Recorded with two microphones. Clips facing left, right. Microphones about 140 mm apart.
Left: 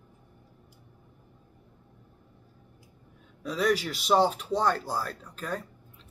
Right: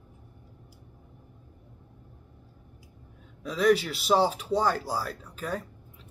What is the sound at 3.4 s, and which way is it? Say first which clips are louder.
Speech: right 3 dB; centre (ahead or behind).